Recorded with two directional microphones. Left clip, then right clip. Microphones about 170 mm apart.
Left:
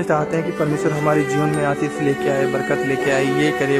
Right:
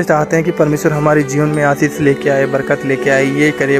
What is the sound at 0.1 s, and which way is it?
Speech, 35° right (ahead or behind).